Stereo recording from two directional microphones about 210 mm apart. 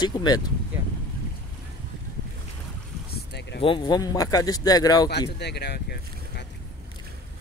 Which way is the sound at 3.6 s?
20° left (ahead or behind).